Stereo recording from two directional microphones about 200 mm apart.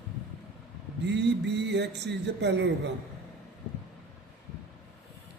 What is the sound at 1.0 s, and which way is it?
A man's voice, 60° right (ahead or behind).